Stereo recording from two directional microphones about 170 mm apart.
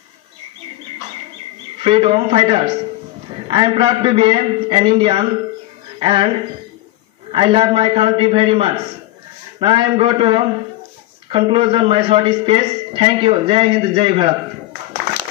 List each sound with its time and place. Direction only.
1.8 s a man's voice: 35° right (ahead or behind)
7.3 s a man's voice: 30° right (ahead or behind)